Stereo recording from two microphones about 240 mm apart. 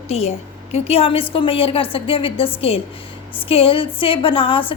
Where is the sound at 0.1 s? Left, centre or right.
Left.